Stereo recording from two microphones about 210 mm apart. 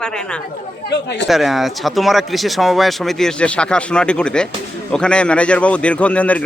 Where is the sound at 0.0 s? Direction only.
5° left (ahead or behind).